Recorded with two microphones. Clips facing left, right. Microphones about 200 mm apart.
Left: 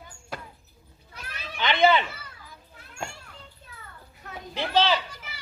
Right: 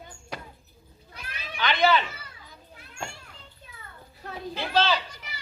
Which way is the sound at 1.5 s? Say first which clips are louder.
Left 2 dB; 20° left (ahead or behind).